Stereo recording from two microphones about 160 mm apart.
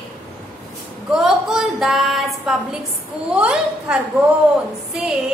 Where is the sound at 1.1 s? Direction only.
Centre (ahead or behind).